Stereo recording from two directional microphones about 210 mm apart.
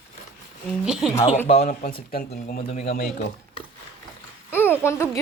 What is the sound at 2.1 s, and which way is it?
Speech, 45° left (ahead or behind).